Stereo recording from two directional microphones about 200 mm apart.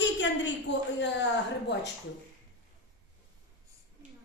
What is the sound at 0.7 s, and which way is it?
Speech, 65° left (ahead or behind).